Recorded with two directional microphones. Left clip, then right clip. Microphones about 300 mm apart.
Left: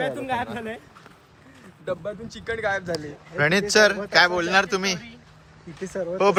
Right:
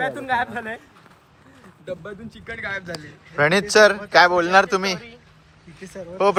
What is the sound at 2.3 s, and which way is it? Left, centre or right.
Speech, centre.